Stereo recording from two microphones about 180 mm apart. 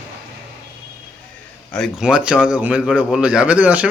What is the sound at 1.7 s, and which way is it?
A man's voice, centre (ahead or behind).